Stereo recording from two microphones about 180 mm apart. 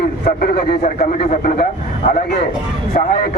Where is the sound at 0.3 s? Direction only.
55° left (ahead or behind).